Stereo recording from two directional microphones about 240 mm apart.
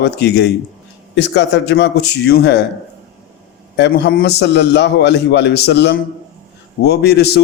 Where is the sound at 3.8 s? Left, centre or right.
Left.